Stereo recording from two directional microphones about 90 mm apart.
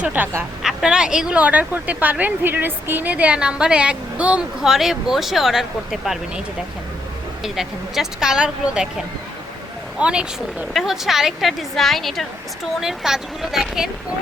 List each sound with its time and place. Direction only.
0.0 s a woman's voice: 20° right (ahead or behind)
0.6 s speech: 5° right (ahead or behind)
7.4 s a woman's voice: 5° right (ahead or behind)